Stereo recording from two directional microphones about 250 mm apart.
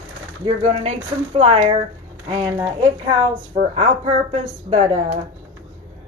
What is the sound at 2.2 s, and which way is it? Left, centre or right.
Speech, centre.